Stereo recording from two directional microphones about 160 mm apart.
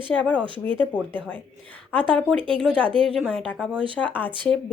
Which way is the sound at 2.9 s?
35° right (ahead or behind).